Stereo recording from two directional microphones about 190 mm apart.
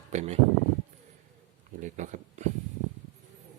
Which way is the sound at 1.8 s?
40° right (ahead or behind).